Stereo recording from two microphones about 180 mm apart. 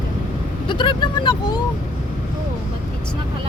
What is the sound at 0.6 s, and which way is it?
Vehicle, 25° left (ahead or behind).